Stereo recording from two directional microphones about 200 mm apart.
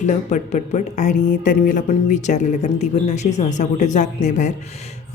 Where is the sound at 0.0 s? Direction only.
35° left (ahead or behind).